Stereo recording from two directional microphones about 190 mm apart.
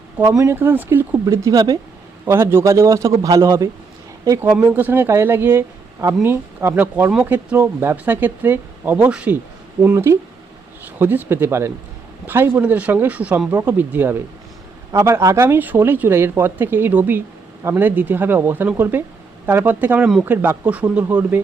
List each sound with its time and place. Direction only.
0.2 s speech: 15° right (ahead or behind)